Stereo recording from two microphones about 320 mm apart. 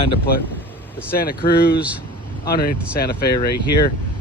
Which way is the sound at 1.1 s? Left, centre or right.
Left.